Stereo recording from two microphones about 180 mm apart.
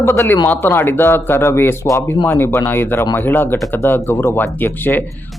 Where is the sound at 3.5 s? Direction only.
Centre (ahead or behind).